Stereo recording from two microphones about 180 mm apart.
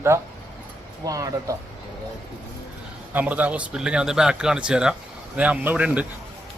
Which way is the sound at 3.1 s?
10° right (ahead or behind).